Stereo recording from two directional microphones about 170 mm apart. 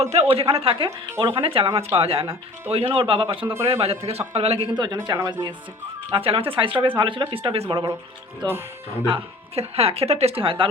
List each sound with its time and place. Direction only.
0.0 s speech: 40° right (ahead or behind)
0.9 s speech: 15° right (ahead or behind)
1.4 s speech: 35° right (ahead or behind)
3.4 s speech: 15° right (ahead or behind)
3.7 s speech: 35° right (ahead or behind)
9.0 s speech: 35° right (ahead or behind)